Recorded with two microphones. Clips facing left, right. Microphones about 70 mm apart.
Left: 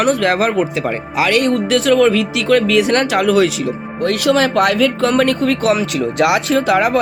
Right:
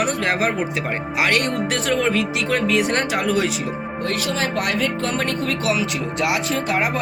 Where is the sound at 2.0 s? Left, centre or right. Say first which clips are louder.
Left 7 dB; left.